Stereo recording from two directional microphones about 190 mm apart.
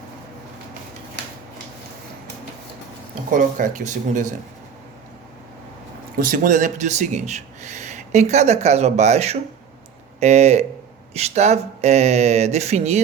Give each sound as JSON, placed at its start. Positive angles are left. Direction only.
{"t": 3.2, "sound": "speech", "side_deg": -45}
{"t": 6.1, "sound": "speech", "side_deg": -45}